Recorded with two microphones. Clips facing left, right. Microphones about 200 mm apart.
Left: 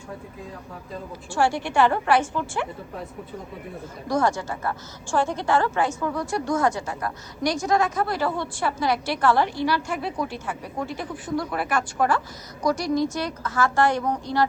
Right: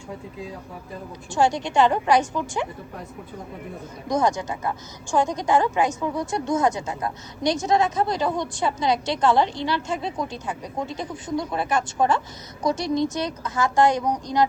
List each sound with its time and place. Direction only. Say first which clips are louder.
1.3 s a woman's voice: right 2 dB; 20° right (ahead or behind)
4.1 s a woman's voice: right 1 dB; 20° right (ahead or behind)